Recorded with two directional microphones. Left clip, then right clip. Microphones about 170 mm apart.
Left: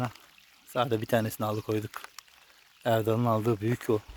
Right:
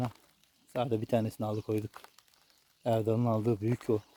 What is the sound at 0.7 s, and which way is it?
Speech, 5° left (ahead or behind).